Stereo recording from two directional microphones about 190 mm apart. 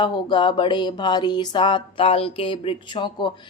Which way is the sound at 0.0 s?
25° left (ahead or behind).